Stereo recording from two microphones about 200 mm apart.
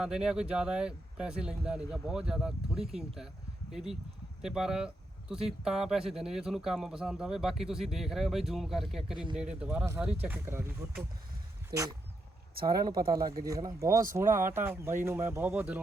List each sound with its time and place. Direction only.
0.0 s a man's voice: 5° right (ahead or behind); by 12.9 s 20° right (ahead or behind)
12.9 s speech: 45° right (ahead or behind)
13.4 s speech: 20° right (ahead or behind)